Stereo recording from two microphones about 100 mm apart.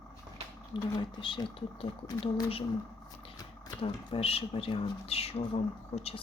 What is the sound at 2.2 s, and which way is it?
Speech, 75° left (ahead or behind).